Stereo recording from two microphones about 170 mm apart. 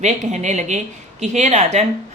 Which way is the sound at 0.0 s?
45° right (ahead or behind).